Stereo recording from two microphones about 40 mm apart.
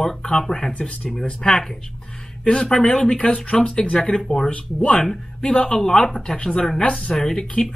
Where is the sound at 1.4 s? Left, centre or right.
Centre.